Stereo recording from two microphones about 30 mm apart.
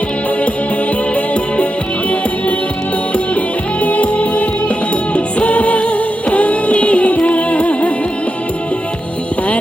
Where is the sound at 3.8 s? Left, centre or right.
Left.